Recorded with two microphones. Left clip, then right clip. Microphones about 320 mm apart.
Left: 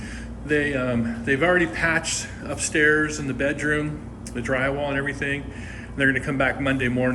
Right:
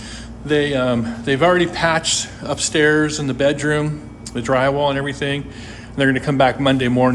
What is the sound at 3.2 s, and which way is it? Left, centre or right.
A man's voice, centre.